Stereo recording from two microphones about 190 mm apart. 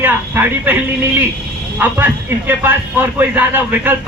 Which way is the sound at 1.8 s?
10° right (ahead or behind).